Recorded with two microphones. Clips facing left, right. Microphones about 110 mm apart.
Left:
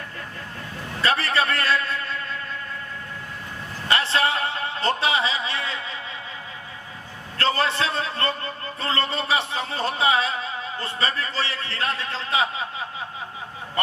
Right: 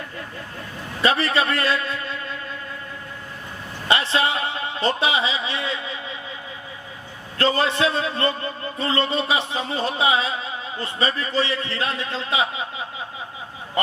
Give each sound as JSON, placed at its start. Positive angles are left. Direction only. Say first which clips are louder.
{"t": 1.0, "sound": "a man's voice", "louder": "right 2 dB", "side_deg": -15}
{"t": 3.8, "sound": "a man's voice", "louder": "right 1 dB", "side_deg": -15}
{"t": 7.3, "sound": "a man's voice", "louder": "right 2 dB", "side_deg": -15}